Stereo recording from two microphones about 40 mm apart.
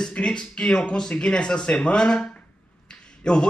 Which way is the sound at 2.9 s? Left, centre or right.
Left.